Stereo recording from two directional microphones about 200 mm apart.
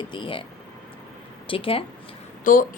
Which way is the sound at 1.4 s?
25° left (ahead or behind).